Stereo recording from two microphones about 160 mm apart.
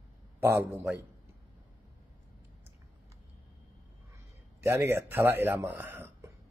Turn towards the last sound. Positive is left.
turn(degrees=-15)  # may be behind; listen again after turning